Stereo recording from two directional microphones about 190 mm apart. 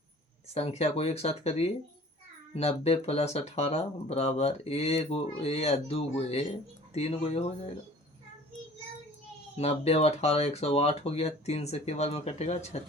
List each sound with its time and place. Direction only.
0.5 s speech: 35° left (ahead or behind)
9.6 s speech: 35° left (ahead or behind)